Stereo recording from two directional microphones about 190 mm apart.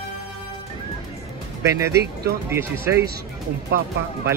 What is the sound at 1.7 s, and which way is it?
Speech, 15° right (ahead or behind).